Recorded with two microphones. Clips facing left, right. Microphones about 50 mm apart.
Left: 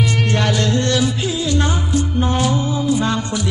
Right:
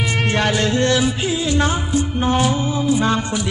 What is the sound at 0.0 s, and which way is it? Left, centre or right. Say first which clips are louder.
Music: even; centre.